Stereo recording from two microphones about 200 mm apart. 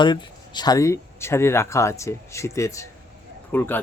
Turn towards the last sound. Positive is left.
turn(degrees=10)  # may be behind; listen again after turning